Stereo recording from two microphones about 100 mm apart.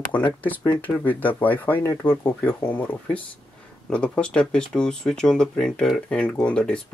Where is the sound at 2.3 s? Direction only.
5° left (ahead or behind).